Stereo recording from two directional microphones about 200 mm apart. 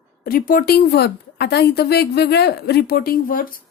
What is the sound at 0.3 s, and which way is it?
A woman's voice, 45° left (ahead or behind).